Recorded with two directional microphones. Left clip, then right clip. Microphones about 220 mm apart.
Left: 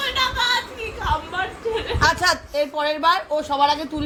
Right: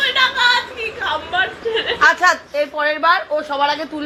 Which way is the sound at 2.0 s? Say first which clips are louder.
Right 6 dB; 45° left (ahead or behind).